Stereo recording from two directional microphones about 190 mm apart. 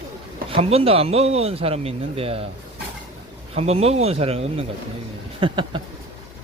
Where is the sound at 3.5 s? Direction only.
30° right (ahead or behind).